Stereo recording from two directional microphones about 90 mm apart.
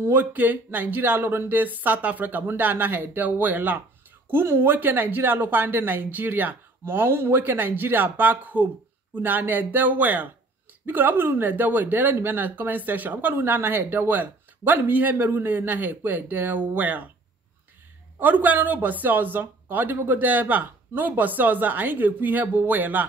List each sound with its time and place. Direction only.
0.0 s speech: 20° right (ahead or behind)
18.2 s speech: 20° right (ahead or behind)